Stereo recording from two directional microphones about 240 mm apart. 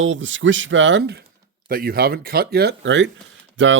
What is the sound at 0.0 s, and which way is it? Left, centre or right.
Speech, right.